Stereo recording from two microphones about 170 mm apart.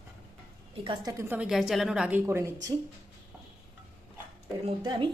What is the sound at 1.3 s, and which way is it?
A woman's voice, 5° right (ahead or behind).